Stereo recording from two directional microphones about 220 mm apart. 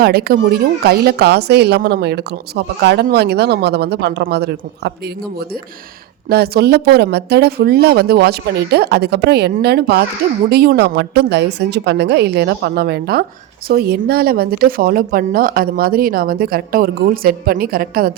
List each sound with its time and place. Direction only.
0.0 s speech: 45° right (ahead or behind)
6.2 s speech: 45° right (ahead or behind)